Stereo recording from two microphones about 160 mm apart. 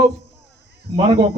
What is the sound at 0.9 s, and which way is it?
Speech, 35° right (ahead or behind).